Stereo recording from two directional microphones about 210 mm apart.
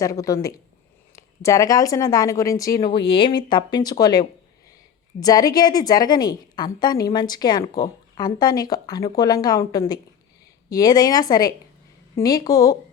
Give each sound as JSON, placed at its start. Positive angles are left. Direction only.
{"t": 0.0, "sound": "a woman's voice", "side_deg": 15}